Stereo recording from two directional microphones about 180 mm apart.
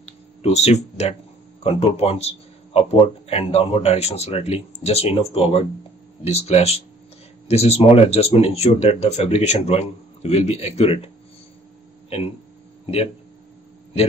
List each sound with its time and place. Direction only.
0.0 s a sound: 35° left (ahead or behind)
1.6 s speech: 35° left (ahead or behind)
12.8 s speech: 35° left (ahead or behind)